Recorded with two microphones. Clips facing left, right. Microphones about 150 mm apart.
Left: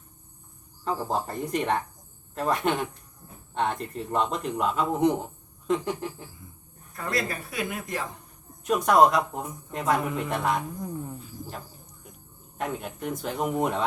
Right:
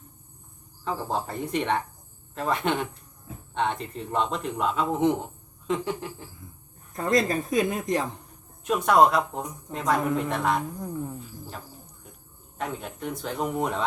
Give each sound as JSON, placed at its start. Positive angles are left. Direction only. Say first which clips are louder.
{"t": 0.9, "sound": "speech", "louder": "left 1 dB", "side_deg": 0}
{"t": 2.3, "sound": "speech", "louder": "left 1 dB", "side_deg": 0}
{"t": 6.9, "sound": "speech", "louder": "right 7 dB", "side_deg": -35}
{"t": 7.5, "sound": "speech", "louder": "right 9 dB", "side_deg": -20}
{"t": 8.6, "sound": "speech", "louder": "even", "side_deg": 0}
{"t": 12.5, "sound": "speech", "louder": "left 1 dB", "side_deg": 5}